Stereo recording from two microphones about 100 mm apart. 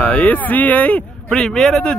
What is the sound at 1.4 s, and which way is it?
Speech, 5° left (ahead or behind).